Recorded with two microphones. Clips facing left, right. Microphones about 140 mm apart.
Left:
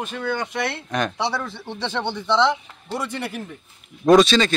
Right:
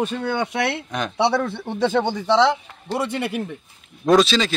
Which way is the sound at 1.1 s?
65° right (ahead or behind).